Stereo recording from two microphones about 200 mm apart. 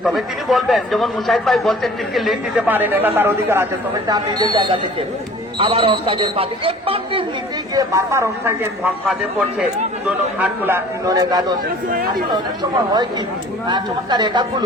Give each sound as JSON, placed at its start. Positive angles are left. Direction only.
{"t": 0.0, "sound": "a man's voice", "side_deg": 0}
{"t": 7.8, "sound": "a man's voice", "side_deg": -15}
{"t": 9.0, "sound": "a man's voice", "side_deg": 0}
{"t": 13.7, "sound": "speech", "side_deg": -20}